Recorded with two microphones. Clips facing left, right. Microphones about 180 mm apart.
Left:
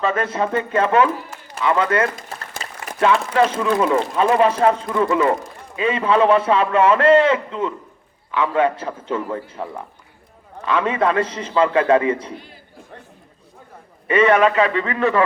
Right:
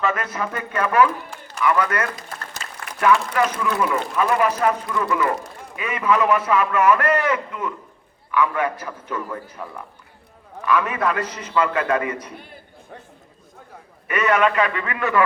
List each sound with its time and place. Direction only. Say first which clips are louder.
0.0 s speech: left 4 dB; 30° left (ahead or behind)
14.1 s a man's voice: left 5 dB; 25° left (ahead or behind)